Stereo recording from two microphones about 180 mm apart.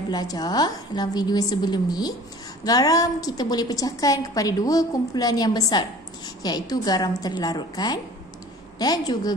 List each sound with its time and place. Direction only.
0.1 s a woman's voice: 20° left (ahead or behind)